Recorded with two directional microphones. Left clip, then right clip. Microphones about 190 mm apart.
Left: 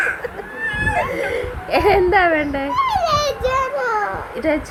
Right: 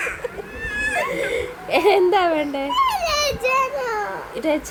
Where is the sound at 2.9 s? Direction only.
30° right (ahead or behind).